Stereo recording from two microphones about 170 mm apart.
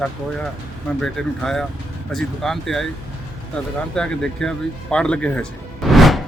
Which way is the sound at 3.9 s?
5° left (ahead or behind).